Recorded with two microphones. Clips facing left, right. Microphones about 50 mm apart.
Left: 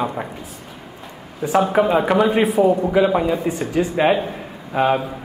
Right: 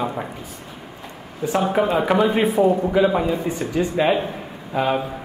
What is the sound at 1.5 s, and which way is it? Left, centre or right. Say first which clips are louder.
A man's voice: left 3 dB; centre.